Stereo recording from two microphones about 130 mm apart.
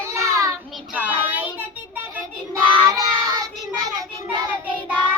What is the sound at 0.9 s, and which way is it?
Child singing, 15° right (ahead or behind).